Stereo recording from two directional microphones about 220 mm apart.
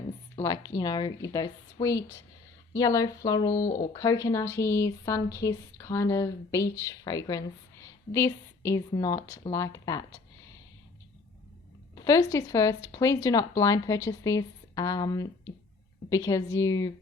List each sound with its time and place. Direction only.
0.3 s speech: 15° left (ahead or behind)
11.9 s speech: 15° left (ahead or behind)